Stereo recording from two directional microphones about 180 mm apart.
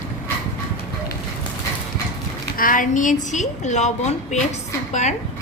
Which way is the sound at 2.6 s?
50° left (ahead or behind).